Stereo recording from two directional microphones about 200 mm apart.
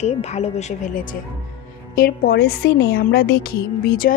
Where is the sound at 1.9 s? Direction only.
50° left (ahead or behind).